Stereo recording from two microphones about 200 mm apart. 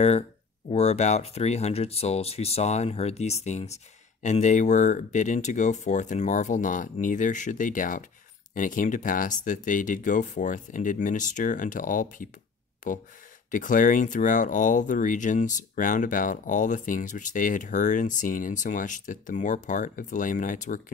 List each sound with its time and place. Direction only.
0.7 s speech: 35° left (ahead or behind)
13.5 s speech: 40° left (ahead or behind)